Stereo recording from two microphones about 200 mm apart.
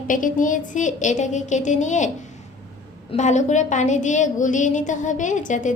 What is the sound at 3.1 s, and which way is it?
A woman's voice, 35° left (ahead or behind).